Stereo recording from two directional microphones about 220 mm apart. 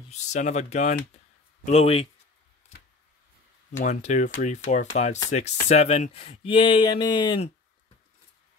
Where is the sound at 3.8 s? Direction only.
30° left (ahead or behind).